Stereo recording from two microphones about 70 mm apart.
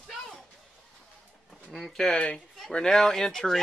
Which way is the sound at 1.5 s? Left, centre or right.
Centre.